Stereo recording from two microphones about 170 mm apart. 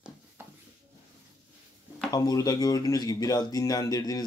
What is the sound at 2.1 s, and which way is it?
Speech, 20° left (ahead or behind).